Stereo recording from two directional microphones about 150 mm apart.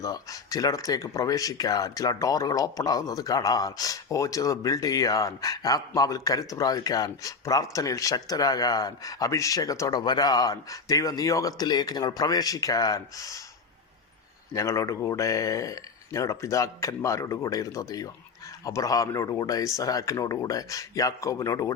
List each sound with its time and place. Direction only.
0.0 s speech: 25° left (ahead or behind)
14.5 s speech: 20° left (ahead or behind)